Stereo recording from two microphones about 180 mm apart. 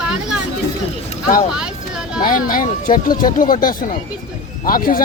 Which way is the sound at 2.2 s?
50° left (ahead or behind).